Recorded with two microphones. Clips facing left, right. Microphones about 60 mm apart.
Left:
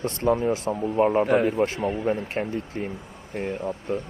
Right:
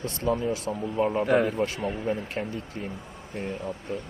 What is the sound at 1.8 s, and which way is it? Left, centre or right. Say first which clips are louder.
Speech: left 4 dB; centre.